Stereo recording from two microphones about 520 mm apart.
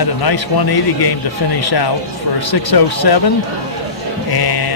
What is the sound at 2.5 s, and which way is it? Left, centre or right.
Speech, left.